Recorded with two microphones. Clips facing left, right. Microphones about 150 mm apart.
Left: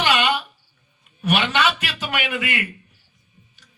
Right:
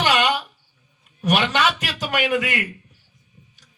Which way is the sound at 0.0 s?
40° right (ahead or behind).